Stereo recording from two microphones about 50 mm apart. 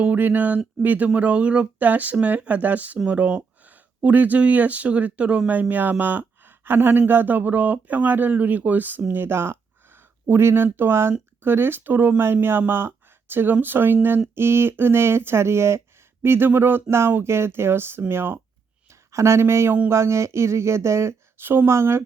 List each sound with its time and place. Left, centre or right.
0.0 s speech: right
5.5 s speech: right
9.1 s speech: right
16.2 s speech: right
18.9 s speech: right
21.3 s speech: right
21.7 s speech: right